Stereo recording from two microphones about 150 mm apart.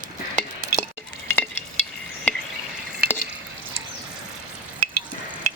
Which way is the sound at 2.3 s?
10° left (ahead or behind).